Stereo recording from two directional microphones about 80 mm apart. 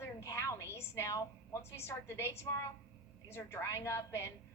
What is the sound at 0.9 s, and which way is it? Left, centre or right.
A woman's voice, left.